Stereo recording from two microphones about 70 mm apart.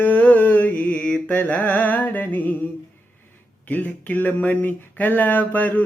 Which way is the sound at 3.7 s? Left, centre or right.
Left.